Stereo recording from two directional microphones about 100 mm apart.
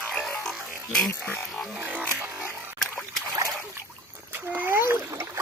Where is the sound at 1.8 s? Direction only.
20° right (ahead or behind).